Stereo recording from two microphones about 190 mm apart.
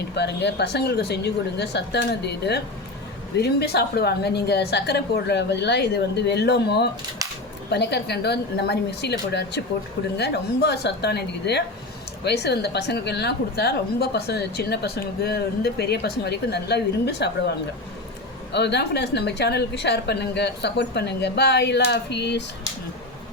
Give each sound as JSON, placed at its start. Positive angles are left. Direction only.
{"t": 0.1, "sound": "a woman's voice", "side_deg": 60}
{"t": 18.5, "sound": "a woman's voice", "side_deg": 60}